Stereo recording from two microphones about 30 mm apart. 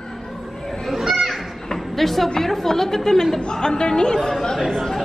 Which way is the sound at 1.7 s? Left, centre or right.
Centre.